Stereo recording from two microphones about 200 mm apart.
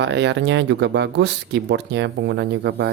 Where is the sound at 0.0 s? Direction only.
60° right (ahead or behind).